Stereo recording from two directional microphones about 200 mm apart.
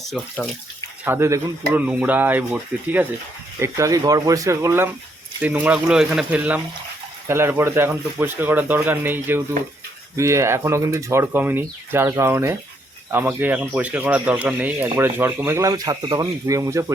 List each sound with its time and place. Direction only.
1.0 s speech: 10° right (ahead or behind)